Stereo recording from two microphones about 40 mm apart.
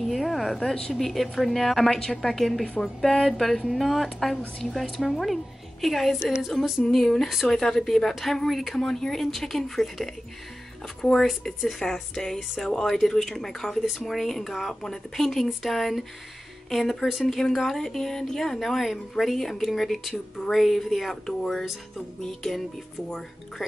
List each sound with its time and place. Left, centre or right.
0.0 s a sound: centre
0.7 s a woman's voice: centre
11.8 s speech: centre